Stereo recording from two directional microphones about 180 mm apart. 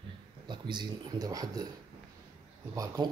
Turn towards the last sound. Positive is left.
turn(degrees=-20)  # may be behind; listen again after turning